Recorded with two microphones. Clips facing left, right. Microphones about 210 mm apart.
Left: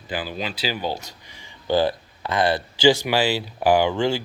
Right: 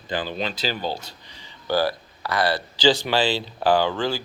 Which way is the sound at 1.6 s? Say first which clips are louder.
Left 2 dB; 20° left (ahead or behind).